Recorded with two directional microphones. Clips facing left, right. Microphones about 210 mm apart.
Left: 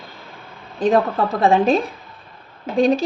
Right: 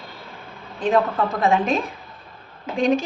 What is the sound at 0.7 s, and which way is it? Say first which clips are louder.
A woman's voice: left 3 dB; 35° left (ahead or behind).